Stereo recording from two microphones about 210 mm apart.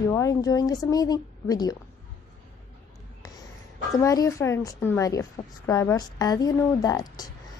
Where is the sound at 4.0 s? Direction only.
15° left (ahead or behind).